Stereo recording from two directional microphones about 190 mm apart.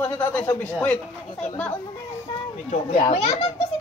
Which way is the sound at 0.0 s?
10° left (ahead or behind).